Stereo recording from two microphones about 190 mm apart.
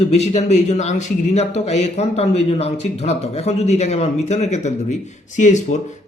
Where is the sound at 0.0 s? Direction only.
35° left (ahead or behind).